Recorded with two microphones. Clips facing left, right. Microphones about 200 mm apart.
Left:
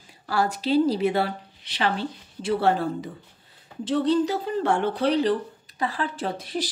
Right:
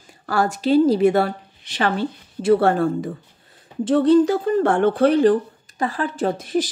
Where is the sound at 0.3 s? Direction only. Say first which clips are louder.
Right 5 dB; 50° right (ahead or behind).